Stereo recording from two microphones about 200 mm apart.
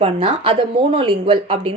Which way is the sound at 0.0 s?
25° right (ahead or behind).